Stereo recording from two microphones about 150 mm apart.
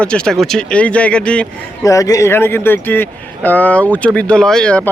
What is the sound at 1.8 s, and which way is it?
Speech, 20° left (ahead or behind).